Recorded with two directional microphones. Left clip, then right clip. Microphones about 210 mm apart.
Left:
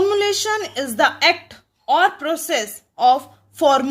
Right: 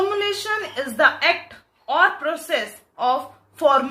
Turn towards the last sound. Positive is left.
turn(degrees=40)  # may be behind; listen again after turning